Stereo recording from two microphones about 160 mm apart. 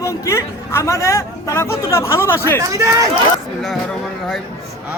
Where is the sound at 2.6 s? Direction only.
20° right (ahead or behind).